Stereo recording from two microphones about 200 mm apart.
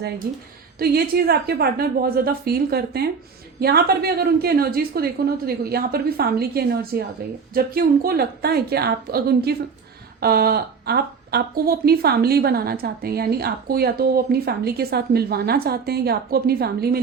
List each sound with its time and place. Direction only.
0.3 s speech: 50° right (ahead or behind)